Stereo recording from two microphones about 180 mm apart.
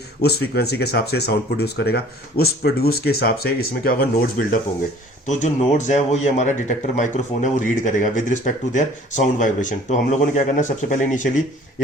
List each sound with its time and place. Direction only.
0.2 s speech: 65° left (ahead or behind)
5.3 s a man's voice: 40° left (ahead or behind)